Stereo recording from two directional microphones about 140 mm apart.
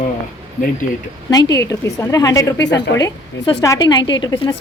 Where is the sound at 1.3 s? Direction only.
25° left (ahead or behind).